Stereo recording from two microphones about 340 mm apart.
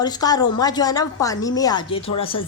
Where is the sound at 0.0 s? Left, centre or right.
Centre.